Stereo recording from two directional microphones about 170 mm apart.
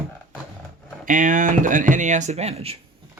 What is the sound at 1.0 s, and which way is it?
Speech, 50° right (ahead or behind).